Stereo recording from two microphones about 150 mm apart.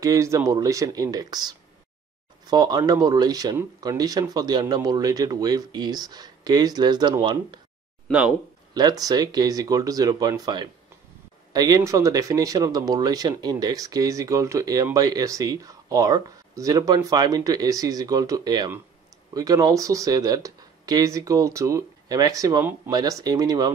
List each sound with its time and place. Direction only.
0.0 s speech: 20° right (ahead or behind)
8.1 s speech: 5° right (ahead or behind)
8.7 s speech: 25° right (ahead or behind)